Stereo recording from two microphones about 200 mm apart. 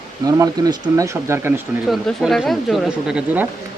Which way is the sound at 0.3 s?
20° right (ahead or behind).